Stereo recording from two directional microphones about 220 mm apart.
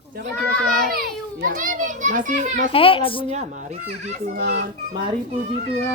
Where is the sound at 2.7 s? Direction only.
25° left (ahead or behind).